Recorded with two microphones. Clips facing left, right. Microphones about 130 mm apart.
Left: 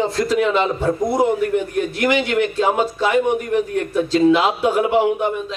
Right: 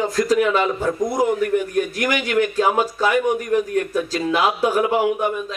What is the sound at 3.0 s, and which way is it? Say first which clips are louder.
A man's voice: left 2 dB; 25° left (ahead or behind).